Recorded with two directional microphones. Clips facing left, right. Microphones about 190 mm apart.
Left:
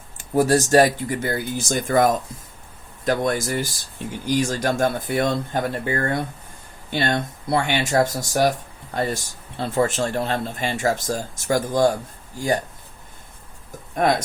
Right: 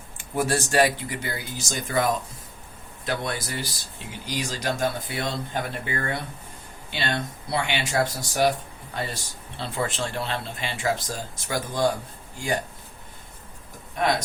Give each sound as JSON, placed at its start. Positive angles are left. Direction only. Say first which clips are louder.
{"t": 0.2, "sound": "speech", "louder": "left 7 dB", "side_deg": 40}
{"t": 13.9, "sound": "speech", "louder": "left 4 dB", "side_deg": 50}